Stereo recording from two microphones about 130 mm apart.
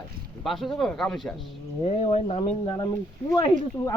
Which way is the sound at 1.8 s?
50° left (ahead or behind).